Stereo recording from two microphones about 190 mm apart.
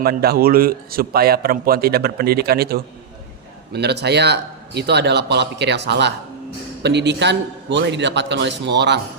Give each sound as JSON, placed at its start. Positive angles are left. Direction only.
{"t": 0.0, "sound": "a man's voice", "side_deg": -55}